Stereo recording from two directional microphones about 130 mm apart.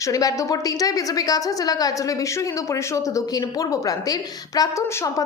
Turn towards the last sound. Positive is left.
turn(degrees=25)  # may be behind; listen again after turning